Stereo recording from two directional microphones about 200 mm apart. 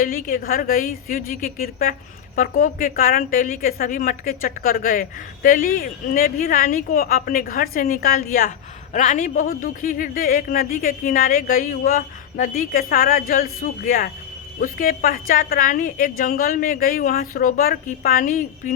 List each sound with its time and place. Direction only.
0.0 s a woman's voice: 45° left (ahead or behind)